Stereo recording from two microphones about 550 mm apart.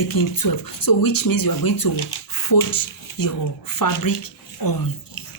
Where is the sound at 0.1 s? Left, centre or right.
Left.